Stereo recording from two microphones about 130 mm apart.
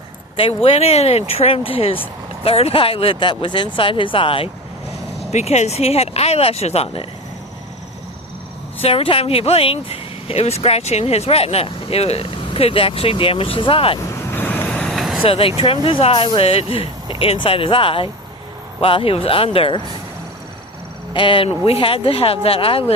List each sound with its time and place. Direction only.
0.3 s speech: 45° left (ahead or behind)
5.3 s speech: 60° left (ahead or behind)
8.8 s speech: 45° left (ahead or behind)
14.1 s vehicle: 20° left (ahead or behind); by 15.2 s centre (ahead or behind)
15.2 s speech: 45° left (ahead or behind)
21.1 s speech: 40° left (ahead or behind)